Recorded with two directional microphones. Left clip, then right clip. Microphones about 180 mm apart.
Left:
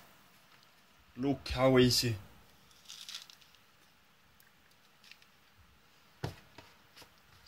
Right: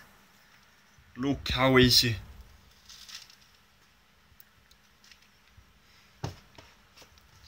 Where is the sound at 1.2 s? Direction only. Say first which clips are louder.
Right 3 dB; 15° left (ahead or behind).